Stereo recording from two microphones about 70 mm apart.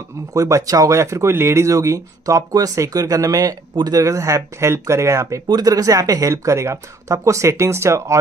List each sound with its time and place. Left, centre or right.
0.3 s speech: right
5.5 s speech: right